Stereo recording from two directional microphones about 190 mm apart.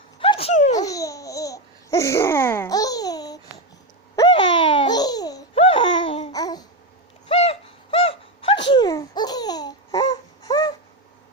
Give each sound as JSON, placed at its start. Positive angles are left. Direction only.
{"t": 0.2, "sound": "a sound", "side_deg": 30}
{"t": 0.9, "sound": "babbling", "side_deg": 15}
{"t": 5.5, "sound": "laughter", "side_deg": 30}
{"t": 6.3, "sound": "babbling", "side_deg": 20}
{"t": 7.3, "sound": "a sound", "side_deg": 30}
{"t": 8.7, "sound": "laughter", "side_deg": 20}